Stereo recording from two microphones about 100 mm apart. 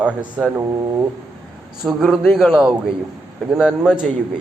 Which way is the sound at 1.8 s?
Centre (ahead or behind).